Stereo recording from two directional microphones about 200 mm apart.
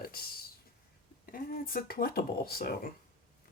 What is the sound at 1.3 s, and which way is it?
Speech, 45° left (ahead or behind).